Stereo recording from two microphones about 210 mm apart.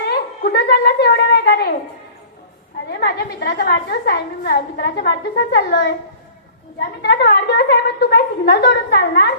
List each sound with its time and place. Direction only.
0.1 s a woman's voice: 50° left (ahead or behind)
2.9 s a woman's voice: 50° left (ahead or behind)
7.0 s a woman's voice: 50° left (ahead or behind)